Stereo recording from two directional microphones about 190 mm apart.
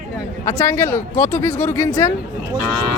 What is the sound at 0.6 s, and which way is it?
Speech, 15° left (ahead or behind).